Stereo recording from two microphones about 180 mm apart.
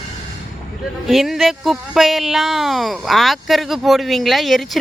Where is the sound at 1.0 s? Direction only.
Centre (ahead or behind).